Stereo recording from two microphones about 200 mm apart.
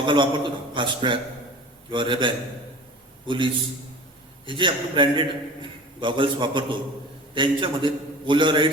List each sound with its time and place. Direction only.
0.0 s a man's voice: 25° right (ahead or behind)